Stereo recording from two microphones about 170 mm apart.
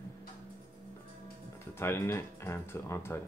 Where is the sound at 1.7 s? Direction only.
15° left (ahead or behind).